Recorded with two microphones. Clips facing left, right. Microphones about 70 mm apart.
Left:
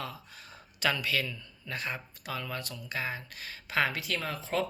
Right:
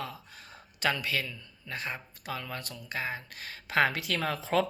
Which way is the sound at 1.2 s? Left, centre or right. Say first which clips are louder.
Left 2 dB; right.